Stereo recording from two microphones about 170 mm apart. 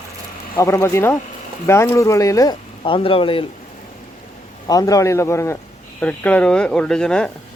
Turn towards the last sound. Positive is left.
turn(degrees=5)  # may be behind; listen again after turning